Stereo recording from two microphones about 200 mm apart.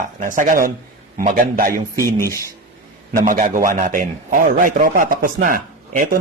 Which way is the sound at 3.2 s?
40° right (ahead or behind).